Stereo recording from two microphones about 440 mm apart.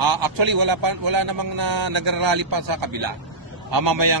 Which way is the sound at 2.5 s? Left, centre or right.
Right.